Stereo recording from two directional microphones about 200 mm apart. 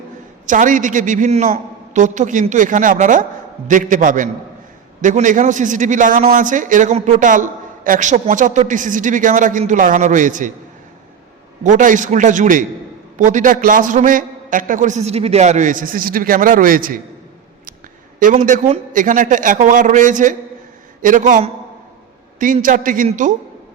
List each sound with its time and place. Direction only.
0.4 s a woman's voice: 40° right (ahead or behind)
11.6 s a woman's voice: 40° right (ahead or behind)
18.2 s a woman's voice: 40° right (ahead or behind)